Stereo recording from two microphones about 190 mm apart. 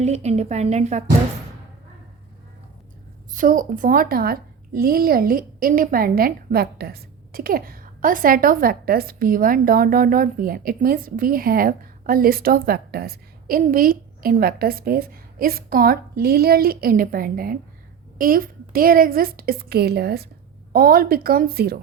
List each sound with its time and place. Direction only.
0.0 s a woman's voice: 35° right (ahead or behind)
3.3 s a woman's voice: 45° right (ahead or behind)